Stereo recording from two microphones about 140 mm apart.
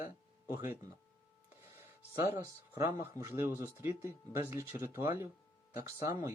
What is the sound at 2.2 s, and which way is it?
Speech, 25° right (ahead or behind).